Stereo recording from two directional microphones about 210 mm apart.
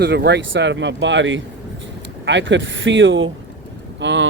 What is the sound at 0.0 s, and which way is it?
Speech, 55° right (ahead or behind).